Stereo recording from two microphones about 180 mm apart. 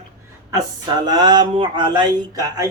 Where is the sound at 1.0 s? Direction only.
25° right (ahead or behind).